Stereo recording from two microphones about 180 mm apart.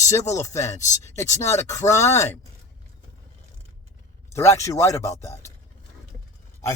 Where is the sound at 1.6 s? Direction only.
15° left (ahead or behind).